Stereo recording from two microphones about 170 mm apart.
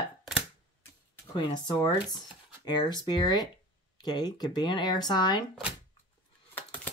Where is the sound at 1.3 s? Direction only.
25° left (ahead or behind).